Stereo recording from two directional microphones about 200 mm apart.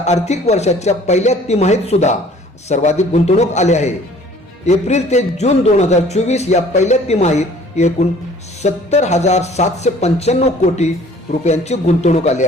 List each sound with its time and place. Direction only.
0.0 s speech: 35° left (ahead or behind)